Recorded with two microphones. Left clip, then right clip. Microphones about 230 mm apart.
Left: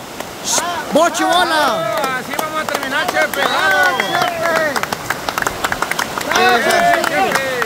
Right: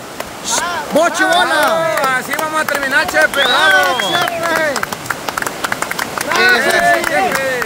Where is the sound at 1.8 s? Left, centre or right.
Right.